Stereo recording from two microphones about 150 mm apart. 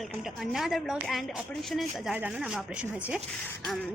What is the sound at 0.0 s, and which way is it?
A woman's voice, centre (ahead or behind).